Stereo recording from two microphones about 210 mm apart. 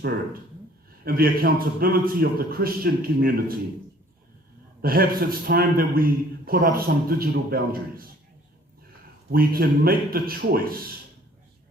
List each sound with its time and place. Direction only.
1.0 s a man's voice: 45° right (ahead or behind)
4.8 s a man's voice: 45° right (ahead or behind)
9.3 s a man's voice: 45° right (ahead or behind)